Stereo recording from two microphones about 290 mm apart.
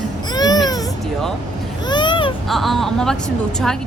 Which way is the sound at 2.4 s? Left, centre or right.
Centre.